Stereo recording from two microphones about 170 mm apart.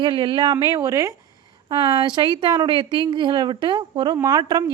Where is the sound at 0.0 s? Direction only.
30° right (ahead or behind).